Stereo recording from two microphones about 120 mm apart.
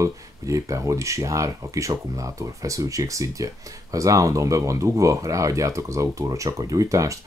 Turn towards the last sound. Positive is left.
turn(degrees=-25)  # may be behind; listen again after turning